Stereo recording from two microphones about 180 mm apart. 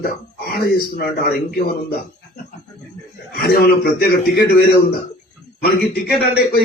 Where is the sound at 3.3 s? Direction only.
60° left (ahead or behind).